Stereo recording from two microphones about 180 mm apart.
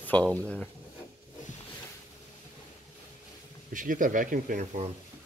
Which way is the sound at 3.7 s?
45° right (ahead or behind).